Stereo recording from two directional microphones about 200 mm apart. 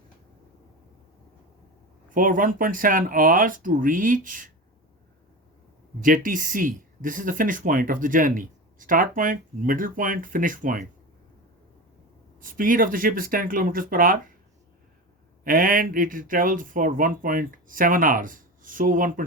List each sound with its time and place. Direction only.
2.0 s speech: 45° right (ahead or behind)
6.2 s speech: 40° right (ahead or behind)
12.4 s speech: 45° right (ahead or behind)
15.4 s speech: 45° right (ahead or behind)